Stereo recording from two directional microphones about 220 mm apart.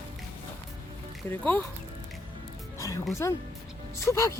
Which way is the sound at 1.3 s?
5° left (ahead or behind).